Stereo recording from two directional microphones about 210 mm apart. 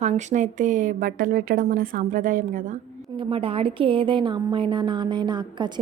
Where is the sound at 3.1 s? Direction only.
25° right (ahead or behind).